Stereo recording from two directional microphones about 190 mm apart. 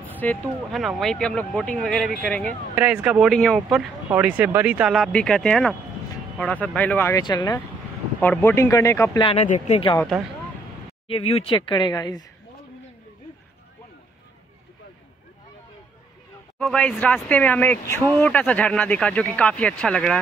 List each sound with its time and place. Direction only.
0.2 s speech: 5° left (ahead or behind)
4.1 s speech: 10° right (ahead or behind); by 7.6 s 20° left (ahead or behind)
8.2 s speech: 10° left (ahead or behind)
9.2 s speech: 35° left (ahead or behind)
11.1 s speech: 30° left (ahead or behind)
16.5 s speech: 5° left (ahead or behind)